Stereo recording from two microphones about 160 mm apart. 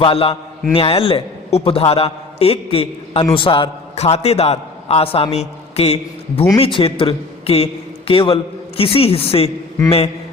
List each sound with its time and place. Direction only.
0.0 s a man's voice: 35° left (ahead or behind)